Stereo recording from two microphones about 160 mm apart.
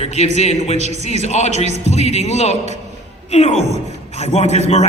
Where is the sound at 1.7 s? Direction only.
45° right (ahead or behind).